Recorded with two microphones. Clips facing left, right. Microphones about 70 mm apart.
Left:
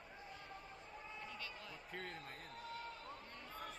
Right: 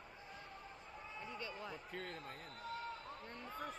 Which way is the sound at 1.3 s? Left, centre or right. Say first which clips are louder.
Right 5 dB; right.